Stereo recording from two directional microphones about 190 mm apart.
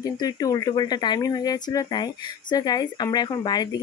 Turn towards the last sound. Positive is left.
turn(degrees=20)  # may be behind; listen again after turning